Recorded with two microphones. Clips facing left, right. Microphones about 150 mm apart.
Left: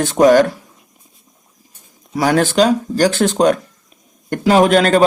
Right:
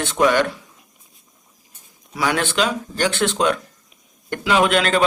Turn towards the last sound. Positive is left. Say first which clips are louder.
# left 6 dB
turn(degrees=40)  # may be behind; listen again after turning